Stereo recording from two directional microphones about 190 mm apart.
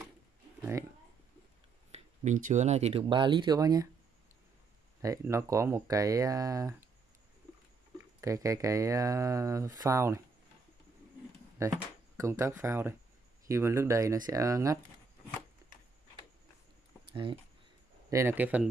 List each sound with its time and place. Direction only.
1.9 s speech: 40° right (ahead or behind); by 3.9 s 20° right (ahead or behind)
5.0 s speech: 15° right (ahead or behind)
8.2 s speech: 15° right (ahead or behind)
11.6 s speech: 15° right (ahead or behind)
17.1 s speech: 25° right (ahead or behind)
18.1 s speech: 10° right (ahead or behind)